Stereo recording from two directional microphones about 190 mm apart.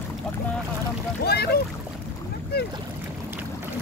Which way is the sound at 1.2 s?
55° left (ahead or behind).